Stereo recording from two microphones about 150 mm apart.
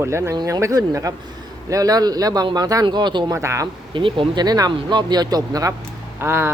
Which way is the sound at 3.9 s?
35° right (ahead or behind).